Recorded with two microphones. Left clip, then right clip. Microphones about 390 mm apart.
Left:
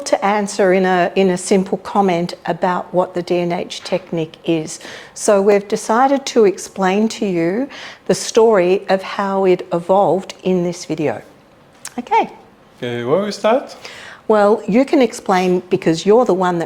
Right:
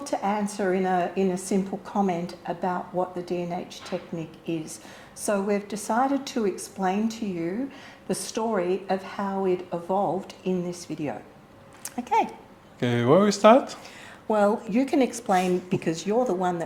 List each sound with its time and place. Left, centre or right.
0.0 s speech: left
11.9 s speech: left
12.8 s speech: right
13.8 s a woman's voice: left